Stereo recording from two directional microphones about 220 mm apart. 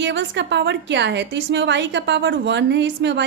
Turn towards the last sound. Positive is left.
turn(degrees=-55)  # may be behind; listen again after turning